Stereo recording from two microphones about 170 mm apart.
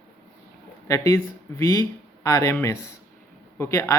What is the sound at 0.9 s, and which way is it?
Speech, 20° left (ahead or behind).